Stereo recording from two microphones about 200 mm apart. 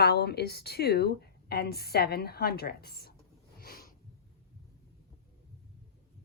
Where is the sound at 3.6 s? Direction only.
50° left (ahead or behind).